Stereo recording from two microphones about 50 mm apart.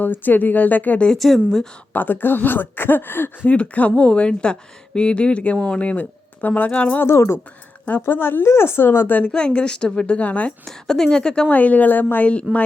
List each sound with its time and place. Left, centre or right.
0.0 s speech: left
1.2 s a woman's voice: centre
1.9 s speech: left
3.5 s a woman's voice: left
8.1 s speech: left
9.3 s a woman's voice: left
10.7 s a woman's voice: centre
11.4 s speech: left
12.2 s a woman's voice: left